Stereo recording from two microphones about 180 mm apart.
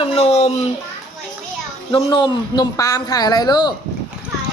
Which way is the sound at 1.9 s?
25° left (ahead or behind).